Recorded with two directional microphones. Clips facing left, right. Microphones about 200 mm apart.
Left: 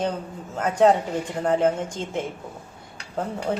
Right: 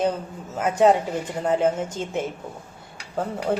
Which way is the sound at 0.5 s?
5° right (ahead or behind).